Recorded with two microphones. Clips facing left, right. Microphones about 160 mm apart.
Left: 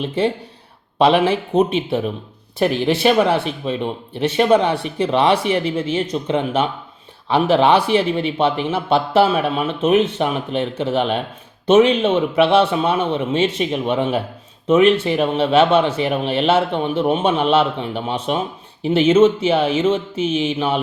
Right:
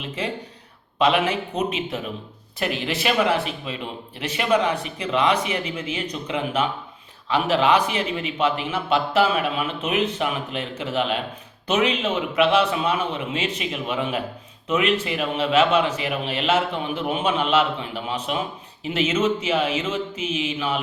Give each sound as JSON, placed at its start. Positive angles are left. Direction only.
{"t": 0.9, "sound": "speech", "side_deg": 30}
{"t": 2.6, "sound": "speech", "side_deg": 30}